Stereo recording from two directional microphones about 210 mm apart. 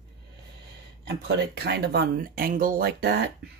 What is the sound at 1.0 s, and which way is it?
Speech, 55° right (ahead or behind).